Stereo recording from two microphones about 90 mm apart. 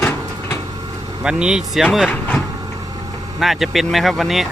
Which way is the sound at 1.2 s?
10° right (ahead or behind).